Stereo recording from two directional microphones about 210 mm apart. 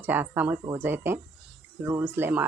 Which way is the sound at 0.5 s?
20° right (ahead or behind).